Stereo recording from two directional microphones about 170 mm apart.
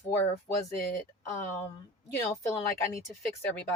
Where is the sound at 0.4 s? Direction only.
15° left (ahead or behind).